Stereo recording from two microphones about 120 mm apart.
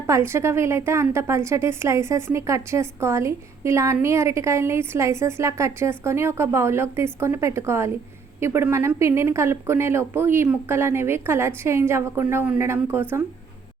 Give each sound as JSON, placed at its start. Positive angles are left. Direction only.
{"t": 0.1, "sound": "a woman's voice", "side_deg": -20}